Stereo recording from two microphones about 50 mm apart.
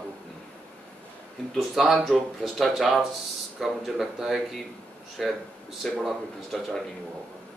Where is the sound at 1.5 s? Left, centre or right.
Centre.